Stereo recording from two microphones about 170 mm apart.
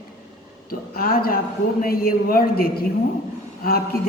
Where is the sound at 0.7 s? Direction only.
60° left (ahead or behind).